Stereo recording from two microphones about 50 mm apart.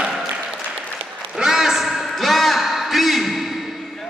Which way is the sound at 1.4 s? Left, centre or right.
Centre.